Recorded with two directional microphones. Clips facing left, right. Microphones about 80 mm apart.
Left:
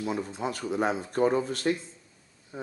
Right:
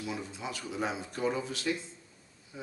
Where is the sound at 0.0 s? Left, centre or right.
Left.